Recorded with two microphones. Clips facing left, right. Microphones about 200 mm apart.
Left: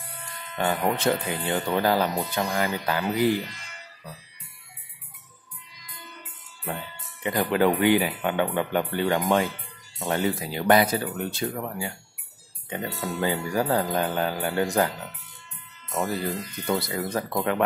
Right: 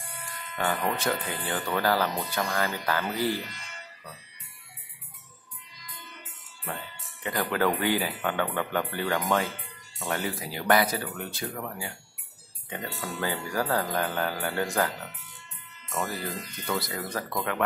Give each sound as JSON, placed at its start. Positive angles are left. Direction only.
{"t": 0.9, "sound": "speech", "side_deg": 25}
{"t": 7.2, "sound": "speech", "side_deg": 20}
{"t": 15.9, "sound": "speech", "side_deg": 20}